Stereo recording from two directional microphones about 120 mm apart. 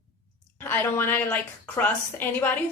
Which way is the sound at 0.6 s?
15° left (ahead or behind).